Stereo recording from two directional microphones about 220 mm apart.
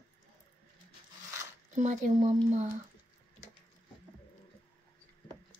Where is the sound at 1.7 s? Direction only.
35° right (ahead or behind).